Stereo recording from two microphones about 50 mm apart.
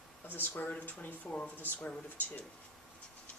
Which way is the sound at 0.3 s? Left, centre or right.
Left.